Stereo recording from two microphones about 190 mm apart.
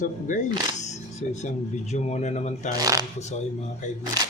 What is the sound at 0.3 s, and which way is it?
Speech, 40° left (ahead or behind).